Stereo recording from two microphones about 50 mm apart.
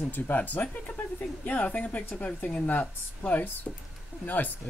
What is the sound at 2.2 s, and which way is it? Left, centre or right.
Speech, left.